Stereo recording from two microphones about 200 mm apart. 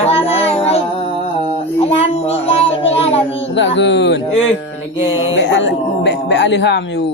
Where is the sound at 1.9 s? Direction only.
30° left (ahead or behind).